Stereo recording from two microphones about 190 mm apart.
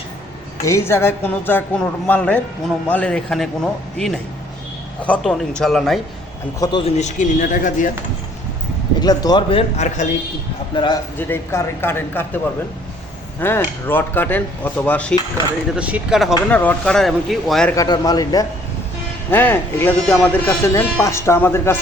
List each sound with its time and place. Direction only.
0.6 s speech: 15° left (ahead or behind)
6.6 s speech: 25° left (ahead or behind); by 7.9 s 45° left (ahead or behind)
9.0 s a man's voice: 20° left (ahead or behind); by 10.1 s 35° left (ahead or behind)
11.2 s speech: 10° left (ahead or behind)
13.4 s speech: 10° left (ahead or behind)
15.7 s speech: 5° right (ahead or behind)
16.5 s speech: 10° left (ahead or behind)
17.7 s a man's voice: 20° left (ahead or behind)